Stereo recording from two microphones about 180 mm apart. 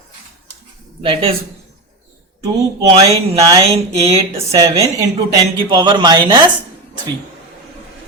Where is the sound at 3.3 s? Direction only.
20° right (ahead or behind).